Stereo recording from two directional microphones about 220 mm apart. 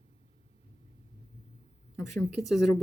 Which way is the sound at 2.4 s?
Centre (ahead or behind).